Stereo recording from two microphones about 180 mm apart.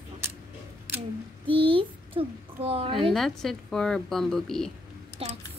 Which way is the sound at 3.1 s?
Centre (ahead or behind).